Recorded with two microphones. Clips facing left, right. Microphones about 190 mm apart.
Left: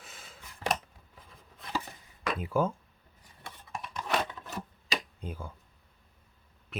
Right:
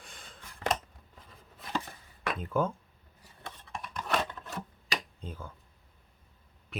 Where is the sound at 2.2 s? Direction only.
10° left (ahead or behind).